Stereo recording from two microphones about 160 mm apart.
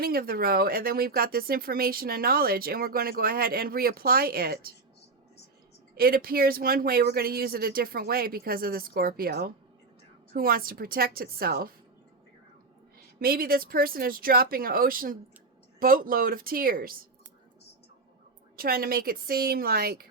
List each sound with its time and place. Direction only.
0.0 s speech: 65° right (ahead or behind)
5.9 s speech: 70° right (ahead or behind)
13.1 s speech: 70° right (ahead or behind)
18.5 s speech: 65° right (ahead or behind)